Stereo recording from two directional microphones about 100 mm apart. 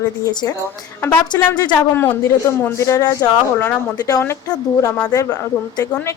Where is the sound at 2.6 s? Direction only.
30° left (ahead or behind).